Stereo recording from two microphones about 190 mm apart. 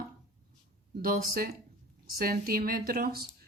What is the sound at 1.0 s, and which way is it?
Speech, 50° right (ahead or behind).